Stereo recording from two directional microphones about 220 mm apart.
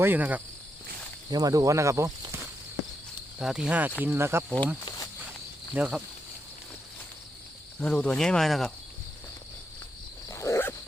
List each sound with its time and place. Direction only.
0.0 s speech: 10° right (ahead or behind)
1.3 s speech: 15° right (ahead or behind)
3.3 s speech: 5° right (ahead or behind)
5.7 s speech: 5° right (ahead or behind)
7.8 s speech: 5° left (ahead or behind)
10.2 s dog: 15° left (ahead or behind)